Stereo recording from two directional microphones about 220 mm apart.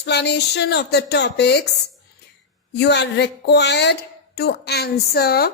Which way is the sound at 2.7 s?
50° left (ahead or behind).